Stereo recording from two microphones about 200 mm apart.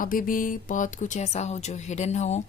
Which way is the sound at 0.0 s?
45° left (ahead or behind).